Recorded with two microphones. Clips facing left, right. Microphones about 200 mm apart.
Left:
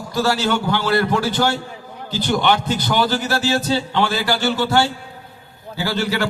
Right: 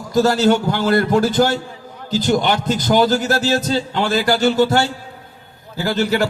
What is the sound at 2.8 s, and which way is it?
A man's voice, 45° right (ahead or behind).